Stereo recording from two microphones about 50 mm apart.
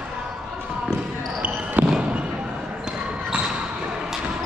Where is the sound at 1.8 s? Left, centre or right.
Right.